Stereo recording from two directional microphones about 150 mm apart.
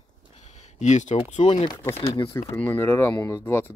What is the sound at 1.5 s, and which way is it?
Speech, 35° left (ahead or behind).